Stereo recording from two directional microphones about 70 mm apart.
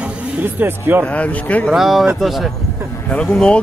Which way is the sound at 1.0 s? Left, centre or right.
Centre.